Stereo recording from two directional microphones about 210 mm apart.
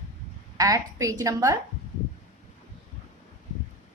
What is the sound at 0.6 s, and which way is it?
Speech, 15° right (ahead or behind).